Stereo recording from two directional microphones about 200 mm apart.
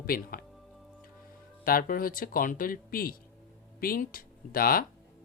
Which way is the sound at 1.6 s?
45° left (ahead or behind).